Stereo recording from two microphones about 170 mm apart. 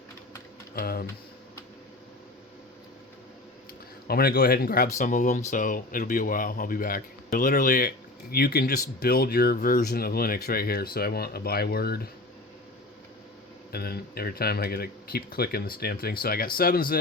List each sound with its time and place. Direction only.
0.8 s speech: 60° left (ahead or behind)
4.1 s speech: 65° left (ahead or behind)
4.9 s speech: 50° left (ahead or behind); by 12.0 s 65° left (ahead or behind)
13.7 s speech: 65° left (ahead or behind)